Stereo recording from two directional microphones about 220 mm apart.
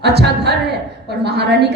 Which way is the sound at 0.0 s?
50° right (ahead or behind).